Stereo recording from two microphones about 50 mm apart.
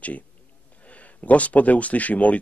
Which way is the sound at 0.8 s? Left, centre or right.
Left.